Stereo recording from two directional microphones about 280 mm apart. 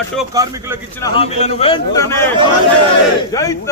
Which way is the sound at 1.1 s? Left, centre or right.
Centre.